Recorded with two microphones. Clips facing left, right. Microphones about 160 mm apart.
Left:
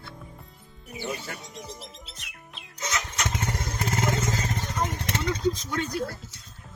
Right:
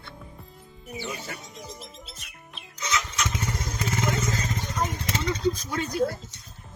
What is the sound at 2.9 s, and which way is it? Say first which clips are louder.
Motorcycle: right 2 dB; 55° left (ahead or behind).